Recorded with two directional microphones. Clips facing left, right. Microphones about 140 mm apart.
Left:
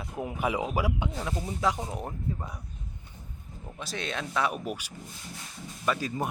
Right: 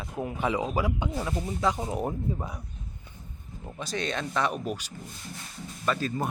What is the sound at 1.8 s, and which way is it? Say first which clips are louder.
Speech: right 5 dB; 15° right (ahead or behind).